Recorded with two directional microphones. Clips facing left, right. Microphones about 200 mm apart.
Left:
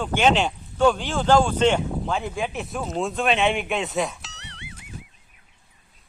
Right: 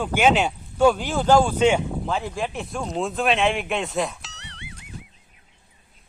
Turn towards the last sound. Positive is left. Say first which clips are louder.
# even
turn(degrees=0)  # may be behind; listen again after turning